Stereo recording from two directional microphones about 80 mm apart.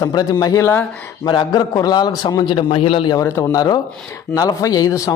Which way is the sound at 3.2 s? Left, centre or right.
Left.